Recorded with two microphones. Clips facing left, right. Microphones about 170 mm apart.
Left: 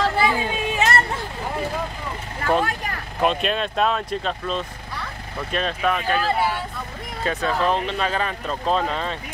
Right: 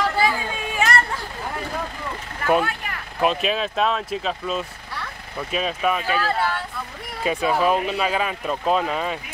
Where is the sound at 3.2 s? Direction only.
Centre (ahead or behind).